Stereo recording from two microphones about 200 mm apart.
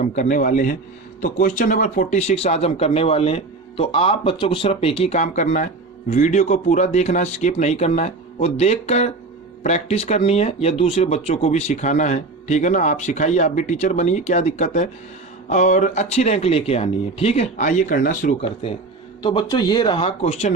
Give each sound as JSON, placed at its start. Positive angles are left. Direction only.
{"t": 0.0, "sound": "speech", "side_deg": 40}
{"t": 19.2, "sound": "speech", "side_deg": 25}